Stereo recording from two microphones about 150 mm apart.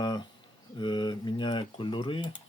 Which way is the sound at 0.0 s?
30° left (ahead or behind).